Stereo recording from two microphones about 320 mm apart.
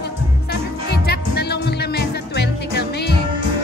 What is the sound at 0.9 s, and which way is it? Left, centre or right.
Music, left.